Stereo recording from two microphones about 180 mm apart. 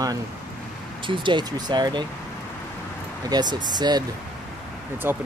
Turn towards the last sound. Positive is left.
turn(degrees=-10)  # may be behind; listen again after turning